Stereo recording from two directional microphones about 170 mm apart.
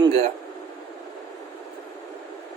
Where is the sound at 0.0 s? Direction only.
35° right (ahead or behind).